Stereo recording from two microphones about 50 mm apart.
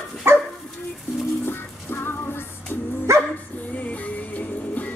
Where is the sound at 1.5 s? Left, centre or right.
Left.